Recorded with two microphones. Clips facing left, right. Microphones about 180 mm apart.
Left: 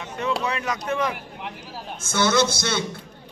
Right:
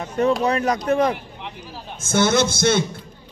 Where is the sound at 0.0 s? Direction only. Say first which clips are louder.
Right 7 dB; 40° right (ahead or behind).